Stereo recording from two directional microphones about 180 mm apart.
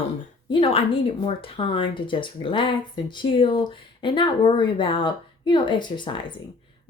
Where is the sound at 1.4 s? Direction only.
30° left (ahead or behind).